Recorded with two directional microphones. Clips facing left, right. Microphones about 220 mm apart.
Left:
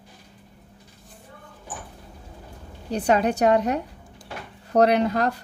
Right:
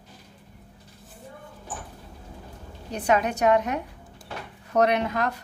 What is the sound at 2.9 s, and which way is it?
A woman's voice, 35° left (ahead or behind).